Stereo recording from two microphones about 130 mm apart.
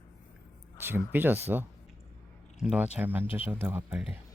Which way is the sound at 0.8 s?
15° right (ahead or behind).